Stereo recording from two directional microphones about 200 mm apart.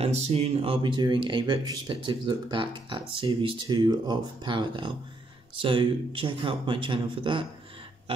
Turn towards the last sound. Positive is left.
turn(degrees=-25)  # may be behind; listen again after turning